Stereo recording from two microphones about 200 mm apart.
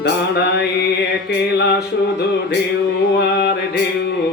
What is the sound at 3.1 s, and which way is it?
Music, 55° left (ahead or behind).